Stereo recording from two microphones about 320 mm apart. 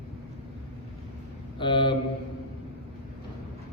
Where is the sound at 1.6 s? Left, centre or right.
Centre.